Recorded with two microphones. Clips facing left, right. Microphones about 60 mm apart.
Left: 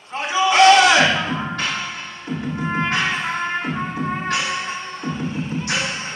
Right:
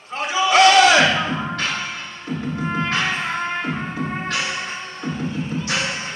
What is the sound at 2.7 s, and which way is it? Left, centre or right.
Music, left.